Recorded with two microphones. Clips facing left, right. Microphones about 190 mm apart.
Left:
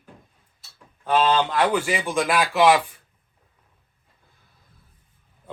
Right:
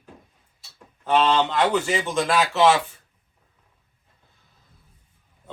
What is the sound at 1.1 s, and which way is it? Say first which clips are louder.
Speech: even; 5° left (ahead or behind).